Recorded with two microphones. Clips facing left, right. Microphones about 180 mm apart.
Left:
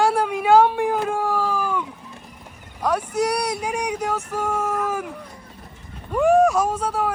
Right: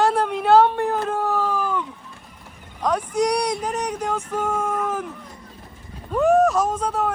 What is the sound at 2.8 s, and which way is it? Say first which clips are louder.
Speech: right 1 dB; 5° left (ahead or behind).